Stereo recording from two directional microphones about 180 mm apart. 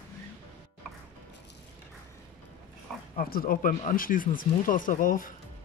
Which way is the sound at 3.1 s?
55° left (ahead or behind).